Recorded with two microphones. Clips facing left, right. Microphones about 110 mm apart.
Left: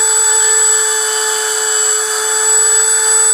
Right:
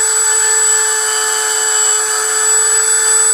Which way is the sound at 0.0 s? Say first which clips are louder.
Left 1 dB; centre (ahead or behind).